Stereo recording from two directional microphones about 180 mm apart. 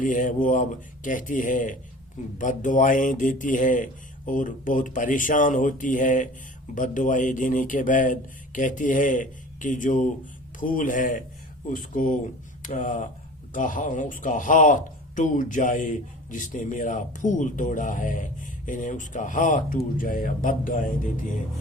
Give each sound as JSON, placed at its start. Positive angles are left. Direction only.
{"t": 0.0, "sound": "speech", "side_deg": 45}